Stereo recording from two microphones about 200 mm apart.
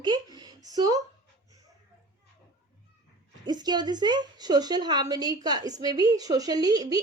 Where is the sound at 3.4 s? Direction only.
20° right (ahead or behind).